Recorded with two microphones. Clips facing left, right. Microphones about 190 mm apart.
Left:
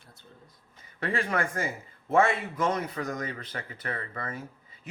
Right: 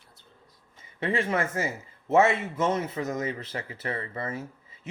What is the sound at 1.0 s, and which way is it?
Speech, 25° right (ahead or behind).